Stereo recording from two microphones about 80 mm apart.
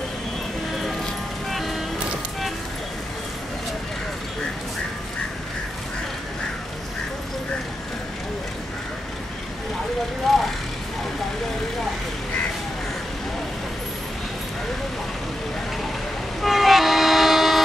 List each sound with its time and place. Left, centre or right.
1.5 s music: centre
10.3 s vehicle: centre
16.3 s train: centre